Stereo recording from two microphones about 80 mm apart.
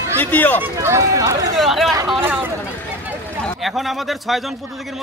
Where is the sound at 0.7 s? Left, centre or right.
Right.